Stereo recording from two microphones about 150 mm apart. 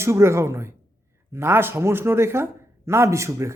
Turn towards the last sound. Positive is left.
turn(degrees=-20)  # may be behind; listen again after turning